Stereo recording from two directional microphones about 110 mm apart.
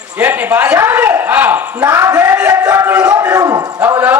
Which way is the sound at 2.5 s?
35° right (ahead or behind).